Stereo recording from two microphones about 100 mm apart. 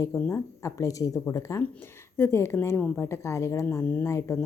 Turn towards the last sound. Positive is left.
turn(degrees=25)  # may be behind; listen again after turning